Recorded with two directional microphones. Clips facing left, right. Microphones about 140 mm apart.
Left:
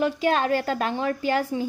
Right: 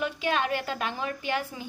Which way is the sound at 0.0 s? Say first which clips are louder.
Left 6 dB; 40° left (ahead or behind).